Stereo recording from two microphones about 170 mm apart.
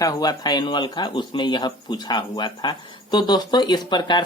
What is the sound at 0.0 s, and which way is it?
Speech, 25° left (ahead or behind).